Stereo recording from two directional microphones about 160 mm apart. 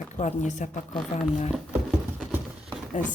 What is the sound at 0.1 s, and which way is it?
Speech, 50° left (ahead or behind).